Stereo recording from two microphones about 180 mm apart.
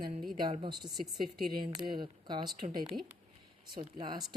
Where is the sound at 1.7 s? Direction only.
25° right (ahead or behind).